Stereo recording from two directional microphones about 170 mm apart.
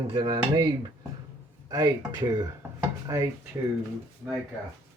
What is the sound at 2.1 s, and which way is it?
Speech, 25° right (ahead or behind).